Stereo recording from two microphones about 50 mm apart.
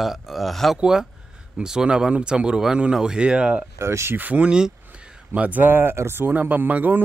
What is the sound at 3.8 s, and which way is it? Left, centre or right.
Speech, right.